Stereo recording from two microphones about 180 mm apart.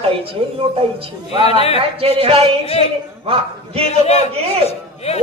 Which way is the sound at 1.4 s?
35° left (ahead or behind).